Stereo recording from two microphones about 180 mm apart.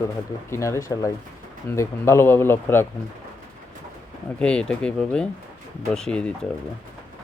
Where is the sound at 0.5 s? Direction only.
15° left (ahead or behind).